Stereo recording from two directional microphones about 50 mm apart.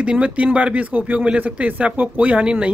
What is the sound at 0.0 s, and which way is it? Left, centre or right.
Speech, right.